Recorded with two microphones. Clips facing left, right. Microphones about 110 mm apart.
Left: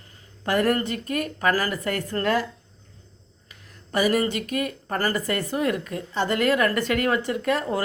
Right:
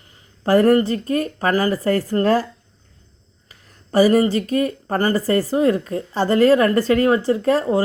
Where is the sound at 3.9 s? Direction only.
30° right (ahead or behind).